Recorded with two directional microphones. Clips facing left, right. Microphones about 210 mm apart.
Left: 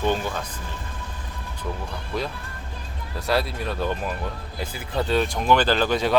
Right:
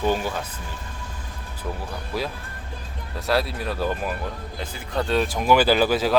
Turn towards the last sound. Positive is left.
turn(degrees=-5)  # may be behind; listen again after turning